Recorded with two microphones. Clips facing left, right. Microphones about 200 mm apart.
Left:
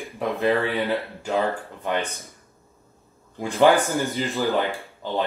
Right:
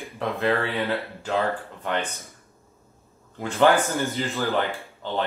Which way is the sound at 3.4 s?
15° left (ahead or behind).